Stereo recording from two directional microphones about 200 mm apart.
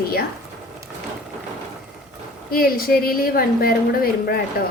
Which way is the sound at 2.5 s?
45° left (ahead or behind).